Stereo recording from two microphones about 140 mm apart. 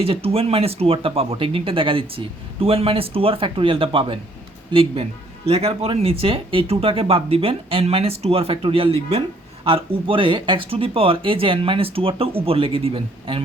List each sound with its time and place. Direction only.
0.0 s speech: 45° right (ahead or behind)